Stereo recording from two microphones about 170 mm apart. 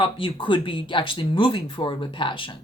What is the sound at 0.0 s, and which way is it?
A woman's voice, 30° left (ahead or behind).